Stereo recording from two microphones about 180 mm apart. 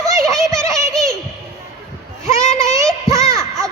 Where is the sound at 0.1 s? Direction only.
15° right (ahead or behind).